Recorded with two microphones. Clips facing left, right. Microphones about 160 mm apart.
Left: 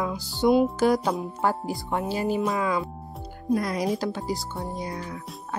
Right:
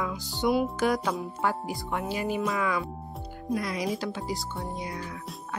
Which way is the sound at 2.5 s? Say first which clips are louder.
Left 3 dB; 30° left (ahead or behind).